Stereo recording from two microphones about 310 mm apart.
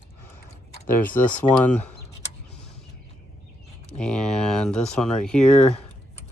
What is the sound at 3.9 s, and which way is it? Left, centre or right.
Speech, centre.